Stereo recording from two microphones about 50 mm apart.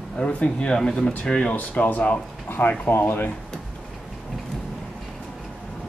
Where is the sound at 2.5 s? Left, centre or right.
Left.